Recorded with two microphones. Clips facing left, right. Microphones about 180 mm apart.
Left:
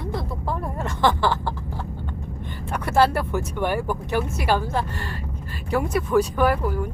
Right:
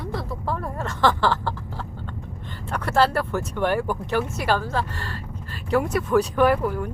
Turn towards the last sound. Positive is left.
turn(degrees=5)  # may be behind; listen again after turning